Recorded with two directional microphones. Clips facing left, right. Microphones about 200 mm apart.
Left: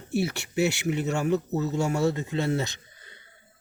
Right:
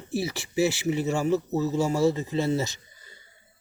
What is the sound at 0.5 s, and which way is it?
Speech, 60° left (ahead or behind).